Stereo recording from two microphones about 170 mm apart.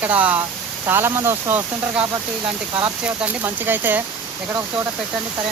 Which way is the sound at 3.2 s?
10° right (ahead or behind).